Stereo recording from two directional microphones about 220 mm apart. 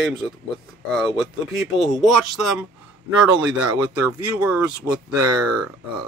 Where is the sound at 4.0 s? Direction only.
5° right (ahead or behind).